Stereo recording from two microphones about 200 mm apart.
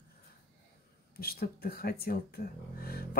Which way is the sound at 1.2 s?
50° left (ahead or behind).